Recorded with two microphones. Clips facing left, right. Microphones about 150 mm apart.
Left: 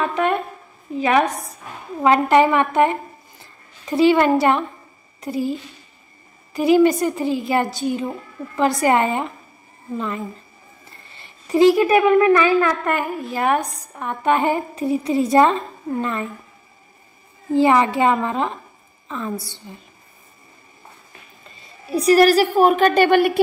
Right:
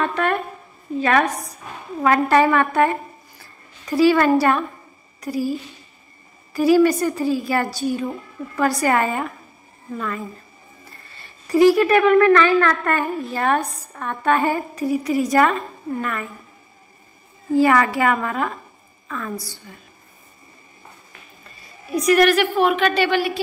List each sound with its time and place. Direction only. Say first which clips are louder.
0.1 s a sound: left 1 dB; 20° left (ahead or behind)
0.9 s a woman's voice: left 1 dB; 15° left (ahead or behind)
1.2 s a woman's voice: left 1 dB; centre (ahead or behind)
2.0 s speech: left 2 dB; 20° left (ahead or behind)
17.5 s speech: left 1 dB; 20° left (ahead or behind)
21.5 s a woman's voice: left 2 dB; 25° left (ahead or behind); by 23.4 s 50° left (ahead or behind)